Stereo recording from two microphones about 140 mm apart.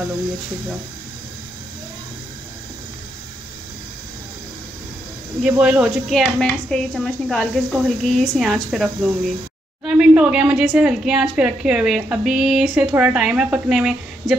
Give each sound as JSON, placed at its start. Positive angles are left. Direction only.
{"t": 5.4, "sound": "a woman's voice", "side_deg": -5}